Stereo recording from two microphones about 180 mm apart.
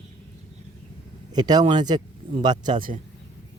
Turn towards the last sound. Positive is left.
turn(degrees=-50)  # may be behind; listen again after turning